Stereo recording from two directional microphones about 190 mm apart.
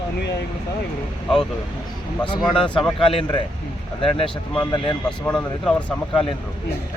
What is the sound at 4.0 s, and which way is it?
Speech, 30° left (ahead or behind).